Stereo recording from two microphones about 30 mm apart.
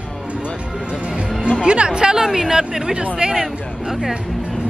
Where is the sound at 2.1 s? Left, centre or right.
Centre.